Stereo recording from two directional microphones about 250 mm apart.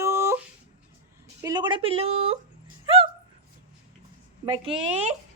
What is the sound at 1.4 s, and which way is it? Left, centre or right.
Speech, centre.